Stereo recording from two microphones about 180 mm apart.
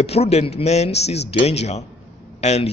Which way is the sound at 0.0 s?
35° left (ahead or behind).